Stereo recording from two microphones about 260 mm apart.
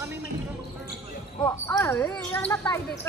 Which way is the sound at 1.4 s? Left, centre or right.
Centre.